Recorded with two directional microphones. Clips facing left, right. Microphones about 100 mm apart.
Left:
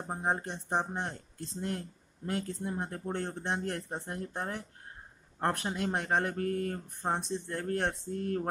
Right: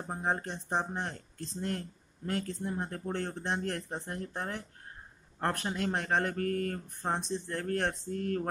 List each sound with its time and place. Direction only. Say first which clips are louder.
0.0 s speech: left 1 dB; 15° left (ahead or behind)